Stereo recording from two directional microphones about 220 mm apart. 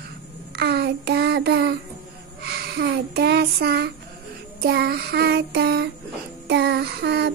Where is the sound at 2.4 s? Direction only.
45° right (ahead or behind).